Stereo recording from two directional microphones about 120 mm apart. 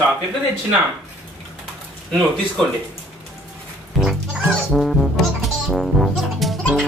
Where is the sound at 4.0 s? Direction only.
Centre (ahead or behind).